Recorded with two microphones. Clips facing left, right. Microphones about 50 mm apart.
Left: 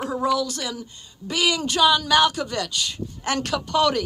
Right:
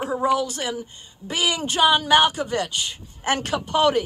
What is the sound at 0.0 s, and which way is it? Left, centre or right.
Speech, right.